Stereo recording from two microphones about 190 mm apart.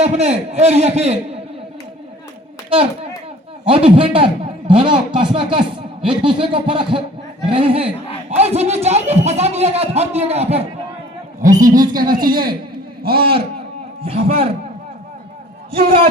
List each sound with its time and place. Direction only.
0.0 s speech: 35° right (ahead or behind)
3.7 s a man's voice: 30° right (ahead or behind)
11.9 s a man's voice: 50° right (ahead or behind)
14.0 s speech: 30° right (ahead or behind)
15.7 s a man's voice: 30° right (ahead or behind)